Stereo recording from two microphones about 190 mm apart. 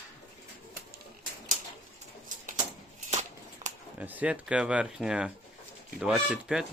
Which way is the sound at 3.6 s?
35° right (ahead or behind).